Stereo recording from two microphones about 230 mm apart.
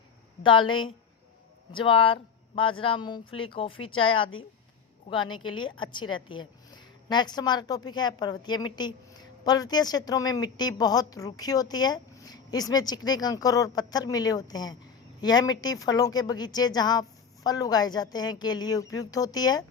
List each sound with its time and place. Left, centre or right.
0.4 s a woman's voice: left